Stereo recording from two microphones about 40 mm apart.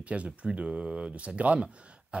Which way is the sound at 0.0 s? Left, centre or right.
Right.